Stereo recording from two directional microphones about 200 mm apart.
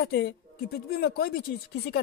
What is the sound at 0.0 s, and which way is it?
Speech, 55° left (ahead or behind).